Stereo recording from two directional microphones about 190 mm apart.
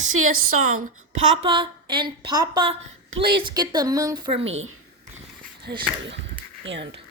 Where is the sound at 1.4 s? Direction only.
25° right (ahead or behind).